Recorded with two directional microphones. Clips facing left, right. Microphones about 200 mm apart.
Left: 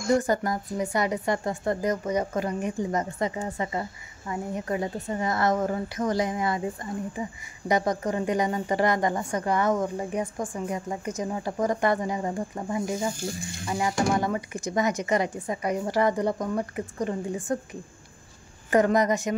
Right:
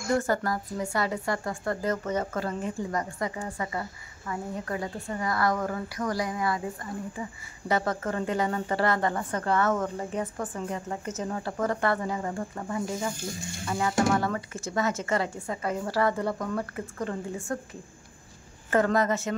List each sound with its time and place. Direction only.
0.1 s a woman's voice: 20° left (ahead or behind)
18.7 s a woman's voice: 15° left (ahead or behind)